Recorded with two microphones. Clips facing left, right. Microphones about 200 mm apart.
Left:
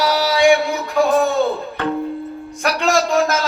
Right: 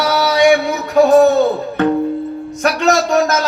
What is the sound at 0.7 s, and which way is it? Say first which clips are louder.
Music: right 6 dB; 40° right (ahead or behind).